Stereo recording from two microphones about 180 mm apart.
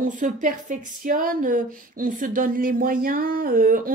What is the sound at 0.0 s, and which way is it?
Speech, 45° right (ahead or behind).